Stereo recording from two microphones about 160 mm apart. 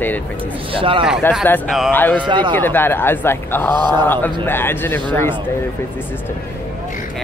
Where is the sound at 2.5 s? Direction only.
15° left (ahead or behind).